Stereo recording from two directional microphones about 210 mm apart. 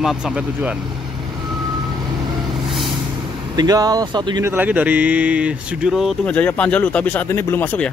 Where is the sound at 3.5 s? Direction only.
20° right (ahead or behind).